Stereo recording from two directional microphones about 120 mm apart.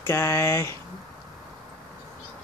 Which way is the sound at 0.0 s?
25° left (ahead or behind).